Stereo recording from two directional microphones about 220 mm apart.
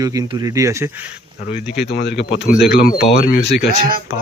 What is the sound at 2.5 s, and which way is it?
Speech, 5° right (ahead or behind).